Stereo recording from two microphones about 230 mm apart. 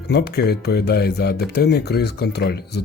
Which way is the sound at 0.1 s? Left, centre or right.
Left.